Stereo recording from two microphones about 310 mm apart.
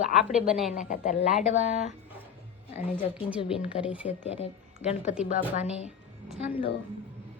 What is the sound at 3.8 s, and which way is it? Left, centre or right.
Speech, centre.